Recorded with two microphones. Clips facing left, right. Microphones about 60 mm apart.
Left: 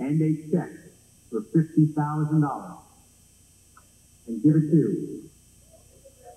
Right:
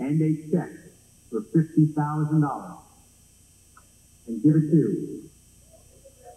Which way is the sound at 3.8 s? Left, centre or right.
Centre.